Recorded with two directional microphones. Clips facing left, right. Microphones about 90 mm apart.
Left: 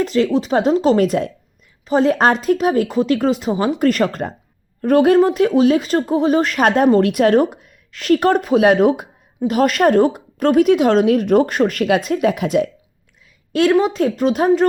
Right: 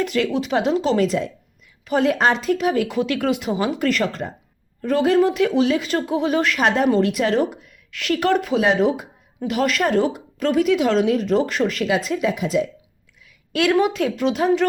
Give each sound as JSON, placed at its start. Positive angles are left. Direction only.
{"t": 0.0, "sound": "speech", "side_deg": 35}
{"t": 1.8, "sound": "speech", "side_deg": 30}
{"t": 7.9, "sound": "speech", "side_deg": 40}
{"t": 13.5, "sound": "speech", "side_deg": 35}